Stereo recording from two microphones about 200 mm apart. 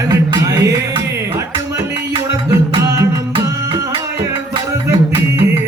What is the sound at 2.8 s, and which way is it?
Music, 15° right (ahead or behind).